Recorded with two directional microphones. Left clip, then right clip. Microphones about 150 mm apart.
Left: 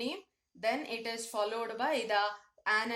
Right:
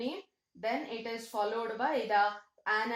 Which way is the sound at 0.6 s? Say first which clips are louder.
Left 1 dB; 30° left (ahead or behind).